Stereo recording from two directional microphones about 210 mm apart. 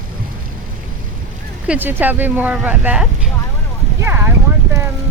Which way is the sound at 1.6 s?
5° right (ahead or behind).